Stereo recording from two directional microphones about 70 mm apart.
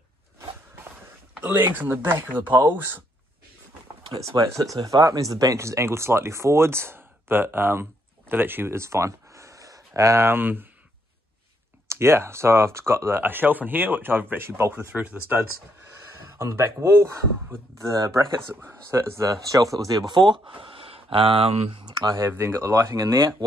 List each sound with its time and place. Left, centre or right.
1.4 s speech: right
4.2 s speech: right
10.2 s speech: right
11.9 s speech: right
13.2 s speech: right
16.3 s speech: right
18.5 s speech: right
19.5 s speech: right
22.3 s speech: right